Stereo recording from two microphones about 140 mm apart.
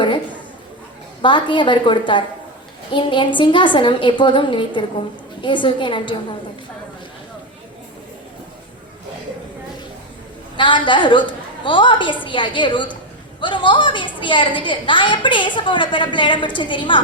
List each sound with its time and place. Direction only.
1.2 s a woman's voice: 35° left (ahead or behind)
10.6 s a woman's voice: 35° left (ahead or behind)